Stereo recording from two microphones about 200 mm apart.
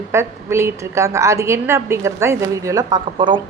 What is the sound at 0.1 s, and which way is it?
A woman's voice, 15° right (ahead or behind).